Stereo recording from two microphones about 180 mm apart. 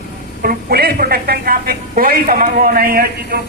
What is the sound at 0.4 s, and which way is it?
Speech, 55° right (ahead or behind).